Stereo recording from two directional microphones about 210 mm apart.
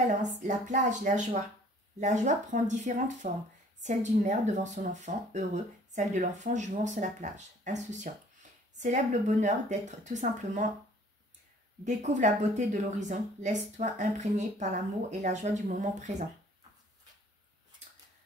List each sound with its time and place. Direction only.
0.2 s speech: 35° right (ahead or behind)
11.8 s speech: 35° right (ahead or behind)